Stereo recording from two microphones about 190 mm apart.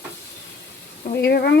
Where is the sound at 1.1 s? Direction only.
55° left (ahead or behind).